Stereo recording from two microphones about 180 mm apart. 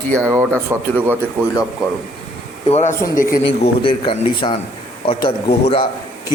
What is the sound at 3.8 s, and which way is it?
A man's voice, 30° left (ahead or behind).